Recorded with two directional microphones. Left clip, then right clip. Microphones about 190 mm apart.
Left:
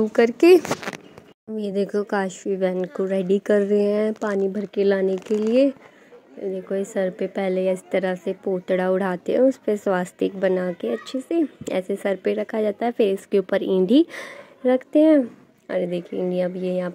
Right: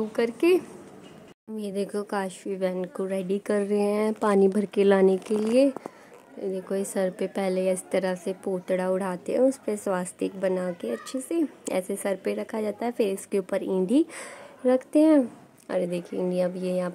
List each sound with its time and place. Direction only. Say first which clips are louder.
0.1 s speech: left 8 dB; 25° left (ahead or behind)
1.6 s a woman's voice: left 6 dB; 15° left (ahead or behind)
4.2 s a woman's voice: right 2 dB; 10° right (ahead or behind)